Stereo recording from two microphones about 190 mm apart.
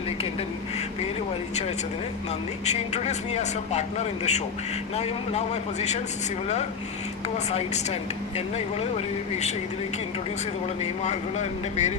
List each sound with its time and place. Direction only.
2.6 s a man's voice: 35° left (ahead or behind)
7.3 s a man's voice: 35° left (ahead or behind)
11.0 s a man's voice: 35° left (ahead or behind)